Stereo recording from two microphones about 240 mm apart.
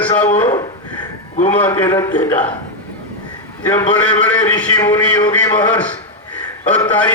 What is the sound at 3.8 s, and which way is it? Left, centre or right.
A man's voice, centre.